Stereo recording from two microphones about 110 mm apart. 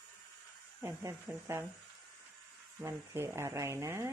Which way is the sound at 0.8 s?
25° right (ahead or behind).